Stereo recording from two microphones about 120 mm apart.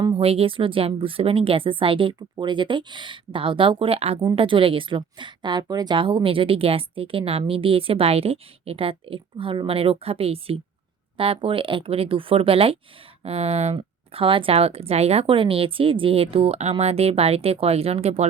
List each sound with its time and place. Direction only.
0.2 s speech: 55° right (ahead or behind)
13.7 s speech: 45° right (ahead or behind)